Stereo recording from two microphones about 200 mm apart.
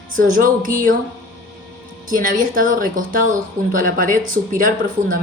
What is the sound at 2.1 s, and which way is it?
Speech, 45° right (ahead or behind).